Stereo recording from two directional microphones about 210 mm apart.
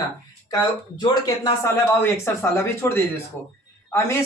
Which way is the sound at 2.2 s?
10° left (ahead or behind).